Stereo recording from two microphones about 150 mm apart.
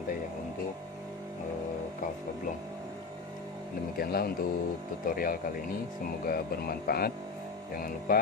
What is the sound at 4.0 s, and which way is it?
Speech, 90° left.